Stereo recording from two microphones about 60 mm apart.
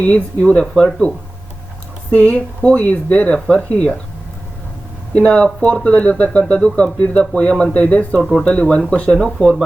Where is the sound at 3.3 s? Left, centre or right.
Centre.